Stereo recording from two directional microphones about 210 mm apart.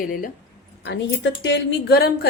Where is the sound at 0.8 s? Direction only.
55° left (ahead or behind).